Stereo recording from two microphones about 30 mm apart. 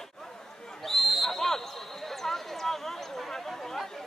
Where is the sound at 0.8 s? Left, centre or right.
Centre.